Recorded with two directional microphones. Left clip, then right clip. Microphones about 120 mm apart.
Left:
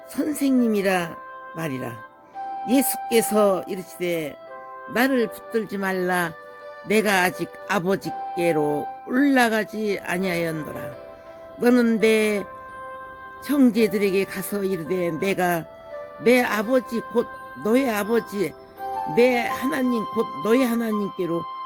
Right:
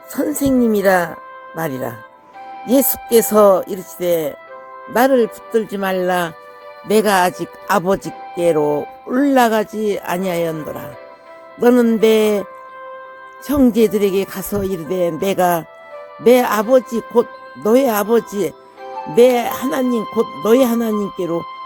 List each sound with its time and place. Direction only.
0.2 s speech: 35° right (ahead or behind)
11.6 s speech: 25° right (ahead or behind)
13.5 s speech: 25° right (ahead or behind)